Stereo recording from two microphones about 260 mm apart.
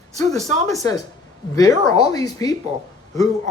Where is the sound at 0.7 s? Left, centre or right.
Centre.